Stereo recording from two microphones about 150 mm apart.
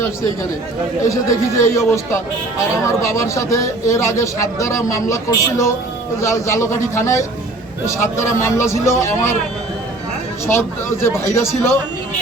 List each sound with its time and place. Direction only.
1.0 s a man's voice: 20° left (ahead or behind)
10.4 s a man's voice: 15° left (ahead or behind)